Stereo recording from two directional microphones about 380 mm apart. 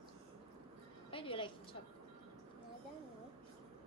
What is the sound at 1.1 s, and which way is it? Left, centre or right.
Speech, centre.